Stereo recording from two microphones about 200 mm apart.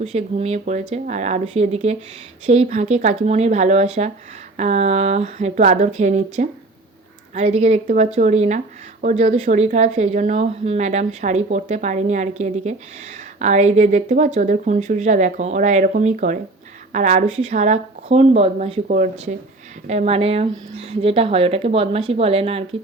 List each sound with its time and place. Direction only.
0.0 s speech: 35° right (ahead or behind)